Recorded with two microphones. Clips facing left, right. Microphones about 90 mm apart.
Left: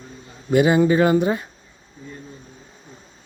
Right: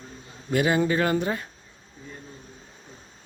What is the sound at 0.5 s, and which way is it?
Speech, 15° left (ahead or behind).